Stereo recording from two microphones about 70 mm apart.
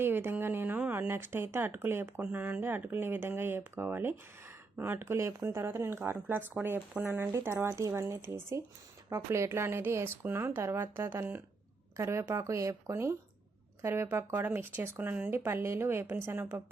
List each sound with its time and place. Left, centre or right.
0.0 s a sound: right
0.8 s speech: right
7.7 s speech: right
7.9 s speech: right
11.9 s speech: right
15.3 s speech: right